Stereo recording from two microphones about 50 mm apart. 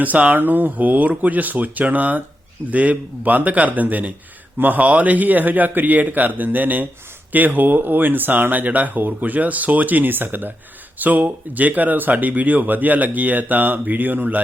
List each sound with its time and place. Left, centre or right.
0.0 s speech: right